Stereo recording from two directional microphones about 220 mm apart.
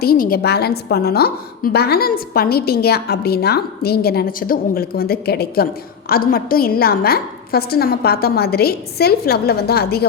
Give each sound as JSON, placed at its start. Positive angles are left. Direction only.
{"t": 0.0, "sound": "a woman's voice", "side_deg": 40}